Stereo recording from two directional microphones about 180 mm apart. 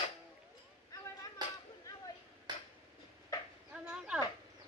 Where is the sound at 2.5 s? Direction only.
25° right (ahead or behind).